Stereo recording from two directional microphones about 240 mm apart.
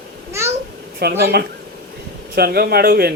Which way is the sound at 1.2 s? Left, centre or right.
Right.